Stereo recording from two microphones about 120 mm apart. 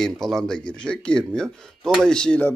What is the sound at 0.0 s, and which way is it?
Speech, 5° left (ahead or behind).